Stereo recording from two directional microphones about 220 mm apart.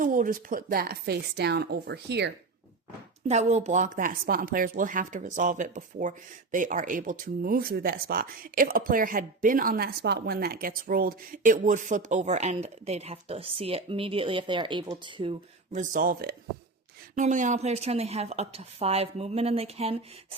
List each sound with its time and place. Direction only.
0.0 s a woman's voice: 35° right (ahead or behind)
3.2 s speech: 30° right (ahead or behind)